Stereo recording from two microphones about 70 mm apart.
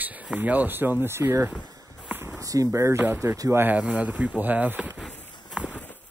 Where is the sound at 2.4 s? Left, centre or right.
Right.